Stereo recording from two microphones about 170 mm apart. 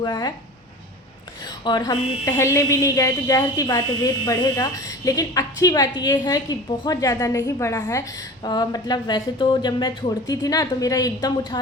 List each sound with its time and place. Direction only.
0.0 s a woman's voice: 25° left (ahead or behind)
1.5 s a woman's voice: 25° left (ahead or behind)